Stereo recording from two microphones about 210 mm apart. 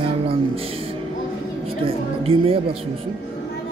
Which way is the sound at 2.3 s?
25° right (ahead or behind).